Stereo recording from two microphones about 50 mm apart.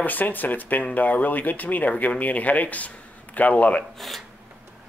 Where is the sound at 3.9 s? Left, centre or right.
Centre.